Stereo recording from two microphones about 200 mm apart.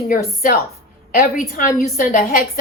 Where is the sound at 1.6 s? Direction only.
45° left (ahead or behind).